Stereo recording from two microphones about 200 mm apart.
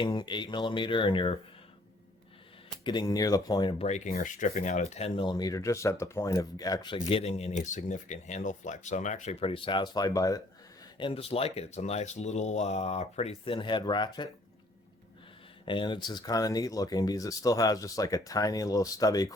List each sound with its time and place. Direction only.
0.0 s speech: 25° left (ahead or behind)
2.8 s speech: 20° left (ahead or behind)
3.8 s speech: 35° left (ahead or behind)
15.6 s speech: 25° left (ahead or behind)